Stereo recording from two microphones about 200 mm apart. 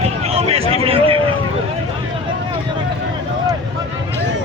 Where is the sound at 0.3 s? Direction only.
30° right (ahead or behind).